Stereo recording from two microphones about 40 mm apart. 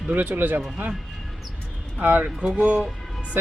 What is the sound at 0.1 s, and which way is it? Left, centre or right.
Speech, right.